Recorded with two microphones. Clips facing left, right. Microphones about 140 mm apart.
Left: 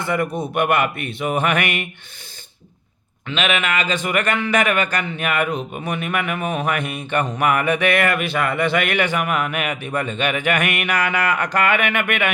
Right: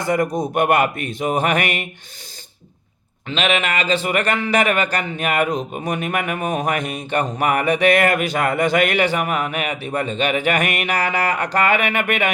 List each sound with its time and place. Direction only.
0.0 s a man's voice: 40° right (ahead or behind)
3.2 s a man's voice: 35° right (ahead or behind)